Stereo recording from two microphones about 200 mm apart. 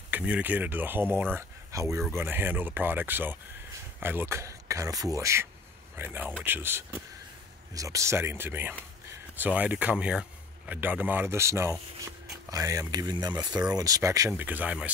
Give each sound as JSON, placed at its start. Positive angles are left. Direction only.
{"t": 0.1, "sound": "speech", "side_deg": -5}